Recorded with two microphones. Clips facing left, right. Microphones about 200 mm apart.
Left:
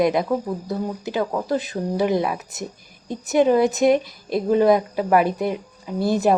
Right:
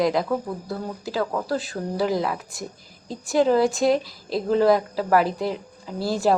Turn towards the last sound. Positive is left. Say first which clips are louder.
# left 3 dB
turn(degrees=20)  # may be behind; listen again after turning